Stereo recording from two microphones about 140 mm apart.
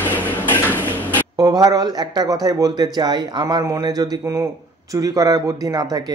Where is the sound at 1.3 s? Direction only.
25° right (ahead or behind).